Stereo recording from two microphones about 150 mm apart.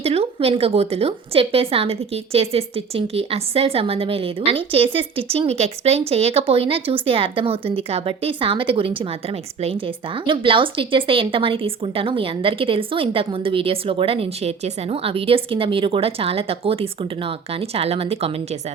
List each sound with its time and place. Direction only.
0.0 s a woman's voice: 40° right (ahead or behind)